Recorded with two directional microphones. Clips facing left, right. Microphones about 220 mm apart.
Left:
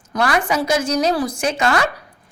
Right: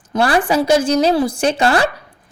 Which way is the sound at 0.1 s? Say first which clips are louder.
Right 4 dB; 30° right (ahead or behind).